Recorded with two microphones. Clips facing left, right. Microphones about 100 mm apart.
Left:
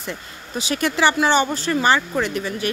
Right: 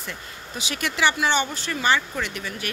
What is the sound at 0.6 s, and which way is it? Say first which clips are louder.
Speech: left 5 dB; 40° left (ahead or behind).